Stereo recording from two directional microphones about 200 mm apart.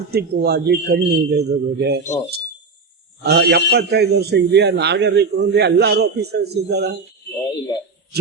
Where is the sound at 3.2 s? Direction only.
55° right (ahead or behind).